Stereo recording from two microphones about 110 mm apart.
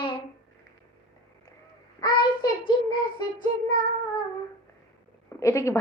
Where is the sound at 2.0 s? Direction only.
40° left (ahead or behind).